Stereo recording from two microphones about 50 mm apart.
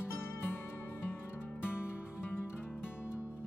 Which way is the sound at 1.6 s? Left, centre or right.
Left.